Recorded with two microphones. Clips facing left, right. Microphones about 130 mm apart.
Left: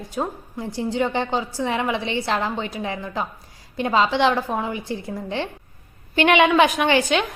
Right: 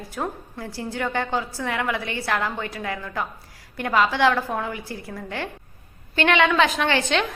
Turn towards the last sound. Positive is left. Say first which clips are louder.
# left 3 dB
turn(degrees=10)  # may be behind; listen again after turning